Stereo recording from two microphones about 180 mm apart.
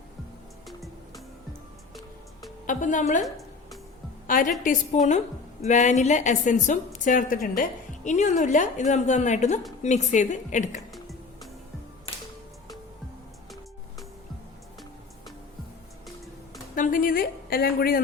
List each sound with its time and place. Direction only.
0.7 s music: centre (ahead or behind)
2.6 s a woman's voice: 45° left (ahead or behind)
3.2 s a sound: centre (ahead or behind)
4.3 s a woman's voice: 50° left (ahead or behind)
16.7 s a woman's voice: 50° left (ahead or behind)